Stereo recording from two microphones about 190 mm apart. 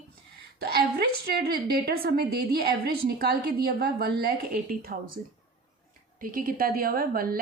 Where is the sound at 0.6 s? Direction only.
55° right (ahead or behind).